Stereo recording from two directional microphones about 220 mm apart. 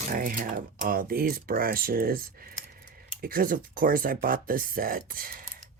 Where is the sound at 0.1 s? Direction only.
40° right (ahead or behind).